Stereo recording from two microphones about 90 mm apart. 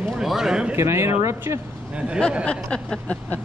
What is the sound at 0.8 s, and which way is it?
Speech, 30° right (ahead or behind).